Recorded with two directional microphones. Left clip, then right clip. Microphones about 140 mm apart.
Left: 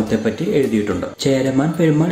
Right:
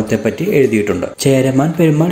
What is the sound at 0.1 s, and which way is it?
Speech, 30° right (ahead or behind).